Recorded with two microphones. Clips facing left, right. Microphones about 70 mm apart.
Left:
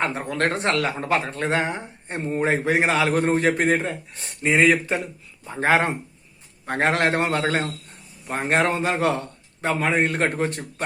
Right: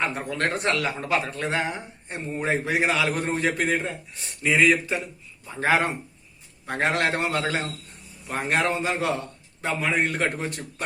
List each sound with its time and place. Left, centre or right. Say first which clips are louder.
0.3 s speech: left 3 dB; left
4.4 s speech: left 2 dB; left
4.7 s a man's voice: left 2 dB; left